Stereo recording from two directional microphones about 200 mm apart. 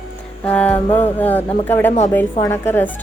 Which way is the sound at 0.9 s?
30° left (ahead or behind).